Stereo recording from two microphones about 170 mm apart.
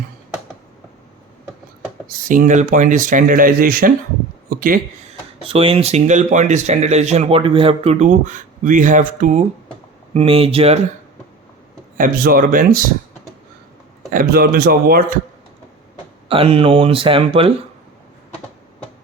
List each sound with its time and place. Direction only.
2.0 s speech: 55° right (ahead or behind)
4.4 s a sound: 55° right (ahead or behind)
5.4 s speech: 35° right (ahead or behind)
10.2 s speech: 35° right (ahead or behind)
11.9 s speech: 55° right (ahead or behind)
14.1 s speech: 60° right (ahead or behind)
16.3 s speech: 35° right (ahead or behind)